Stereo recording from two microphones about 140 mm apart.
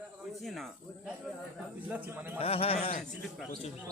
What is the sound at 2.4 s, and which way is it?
Speech, 45° left (ahead or behind).